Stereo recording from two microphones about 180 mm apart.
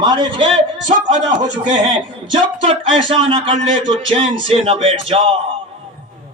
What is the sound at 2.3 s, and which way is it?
A man's voice, 30° right (ahead or behind).